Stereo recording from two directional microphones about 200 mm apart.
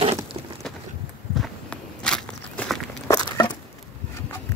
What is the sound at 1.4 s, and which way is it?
Walk, 5° left (ahead or behind).